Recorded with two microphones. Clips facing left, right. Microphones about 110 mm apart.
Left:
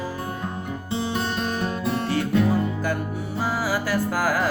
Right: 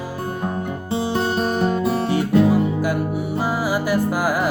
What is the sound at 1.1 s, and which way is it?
Music, 40° right (ahead or behind).